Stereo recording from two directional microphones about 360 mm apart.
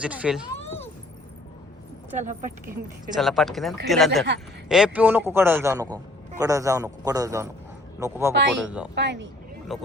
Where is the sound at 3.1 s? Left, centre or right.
Centre.